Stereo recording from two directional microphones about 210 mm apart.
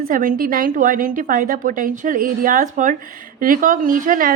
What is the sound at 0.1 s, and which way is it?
A woman's voice, 40° right (ahead or behind).